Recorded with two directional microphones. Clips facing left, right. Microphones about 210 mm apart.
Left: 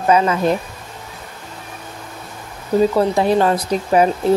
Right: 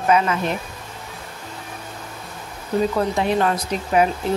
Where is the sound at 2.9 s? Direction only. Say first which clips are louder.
Left 5 dB; 35° left (ahead or behind).